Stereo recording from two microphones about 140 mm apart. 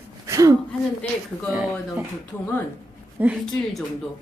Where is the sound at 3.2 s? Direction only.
10° right (ahead or behind).